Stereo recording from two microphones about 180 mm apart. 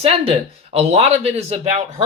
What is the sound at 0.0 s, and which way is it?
Speech, 35° right (ahead or behind).